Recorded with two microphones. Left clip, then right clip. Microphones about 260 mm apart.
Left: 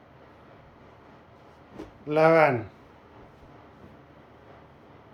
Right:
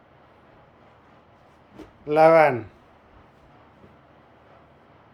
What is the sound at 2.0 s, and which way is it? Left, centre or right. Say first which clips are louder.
Speech: right 4 dB; centre.